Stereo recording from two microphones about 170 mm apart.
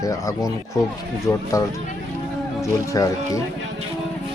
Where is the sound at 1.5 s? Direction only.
20° left (ahead or behind).